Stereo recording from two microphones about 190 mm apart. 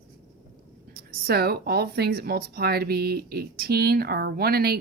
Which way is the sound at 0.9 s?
55° right (ahead or behind).